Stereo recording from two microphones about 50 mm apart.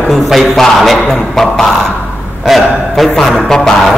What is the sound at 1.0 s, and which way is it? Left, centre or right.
Speech, centre.